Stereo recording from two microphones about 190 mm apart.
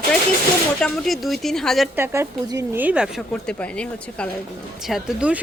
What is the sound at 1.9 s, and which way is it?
A woman's voice, 15° right (ahead or behind).